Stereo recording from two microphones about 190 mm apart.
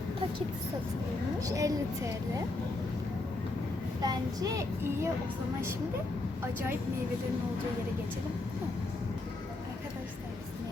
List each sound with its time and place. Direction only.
1.4 s speech: 20° right (ahead or behind)
4.0 s child singing: 20° right (ahead or behind)